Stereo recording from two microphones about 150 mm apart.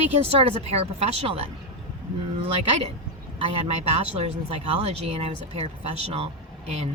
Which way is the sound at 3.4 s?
40° right (ahead or behind).